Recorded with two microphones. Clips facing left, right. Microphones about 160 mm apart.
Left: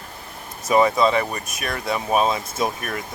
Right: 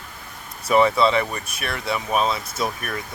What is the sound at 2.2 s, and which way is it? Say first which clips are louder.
Speech: left 2 dB; 15° left (ahead or behind).